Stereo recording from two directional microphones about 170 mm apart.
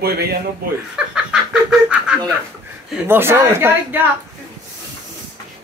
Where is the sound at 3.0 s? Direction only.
15° right (ahead or behind).